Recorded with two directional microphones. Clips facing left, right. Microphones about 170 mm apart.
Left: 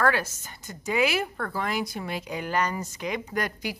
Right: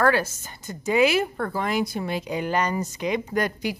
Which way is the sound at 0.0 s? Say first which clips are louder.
Right 4 dB; 30° right (ahead or behind).